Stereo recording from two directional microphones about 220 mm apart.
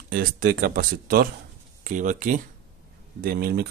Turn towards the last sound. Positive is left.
turn(degrees=-45)  # may be behind; listen again after turning